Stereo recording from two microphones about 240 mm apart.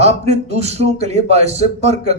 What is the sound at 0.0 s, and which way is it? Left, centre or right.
A man's voice, right.